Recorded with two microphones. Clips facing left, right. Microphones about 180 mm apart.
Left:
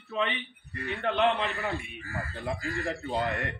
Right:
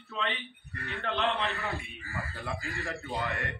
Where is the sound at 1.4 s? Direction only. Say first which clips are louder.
Left 2 dB; 20° left (ahead or behind).